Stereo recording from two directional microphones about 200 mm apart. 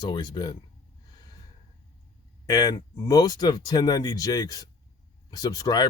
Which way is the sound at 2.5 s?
20° left (ahead or behind).